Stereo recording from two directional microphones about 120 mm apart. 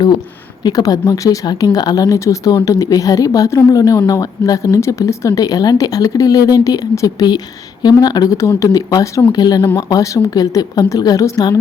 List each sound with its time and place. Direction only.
0.6 s speech: 30° left (ahead or behind)